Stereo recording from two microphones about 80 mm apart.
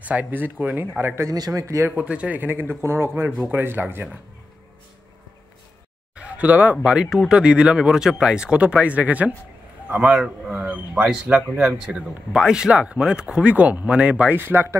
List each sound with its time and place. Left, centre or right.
0.0 s speech: centre
1.3 s speech: right
2.0 s speech: centre
6.1 s speech: centre